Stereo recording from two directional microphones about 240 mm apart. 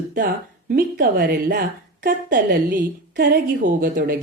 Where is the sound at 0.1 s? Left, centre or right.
Right.